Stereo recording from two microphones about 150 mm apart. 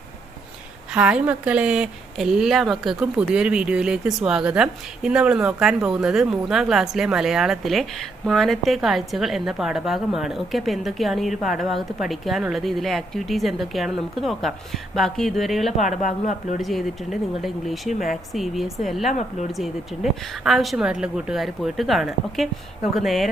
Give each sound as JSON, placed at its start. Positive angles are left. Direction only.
{"t": 0.9, "sound": "a woman's voice", "side_deg": -5}
{"t": 15.9, "sound": "speech", "side_deg": 60}
{"t": 16.6, "sound": "a woman's voice", "side_deg": 0}